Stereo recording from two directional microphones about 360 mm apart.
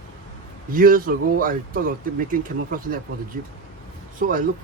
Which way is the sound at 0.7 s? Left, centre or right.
Right.